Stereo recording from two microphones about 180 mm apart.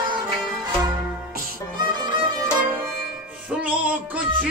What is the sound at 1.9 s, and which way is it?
Music, 25° right (ahead or behind).